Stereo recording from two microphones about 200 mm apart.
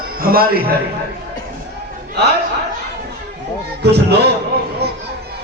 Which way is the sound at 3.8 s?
55° right (ahead or behind).